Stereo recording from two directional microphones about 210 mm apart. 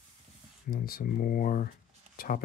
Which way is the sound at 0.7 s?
45° left (ahead or behind).